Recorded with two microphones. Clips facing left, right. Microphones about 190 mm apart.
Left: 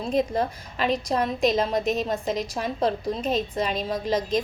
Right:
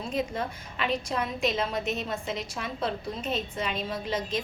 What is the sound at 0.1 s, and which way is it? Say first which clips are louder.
A woman's voice: left 7 dB; 40° left (ahead or behind).